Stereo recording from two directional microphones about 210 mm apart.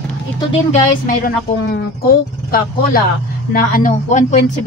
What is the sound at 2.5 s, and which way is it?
Speech, 45° left (ahead or behind).